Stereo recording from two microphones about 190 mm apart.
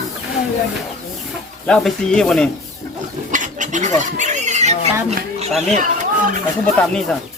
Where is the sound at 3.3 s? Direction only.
40° right (ahead or behind).